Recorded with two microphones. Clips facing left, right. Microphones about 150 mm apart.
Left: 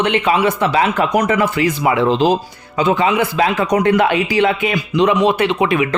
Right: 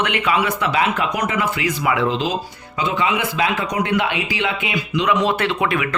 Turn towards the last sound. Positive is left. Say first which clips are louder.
# left 5 dB
turn(degrees=20)  # may be behind; listen again after turning